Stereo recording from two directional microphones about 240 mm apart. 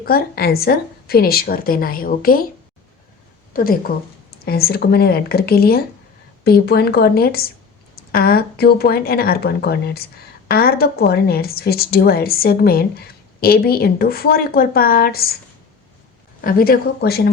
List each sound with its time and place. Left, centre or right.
0.0 s a woman's voice: left
3.5 s a woman's voice: left
16.4 s a woman's voice: left